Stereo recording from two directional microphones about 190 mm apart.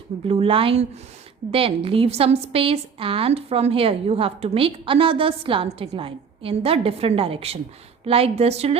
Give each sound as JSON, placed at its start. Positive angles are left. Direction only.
{"t": 0.3, "sound": "a woman's voice", "side_deg": -30}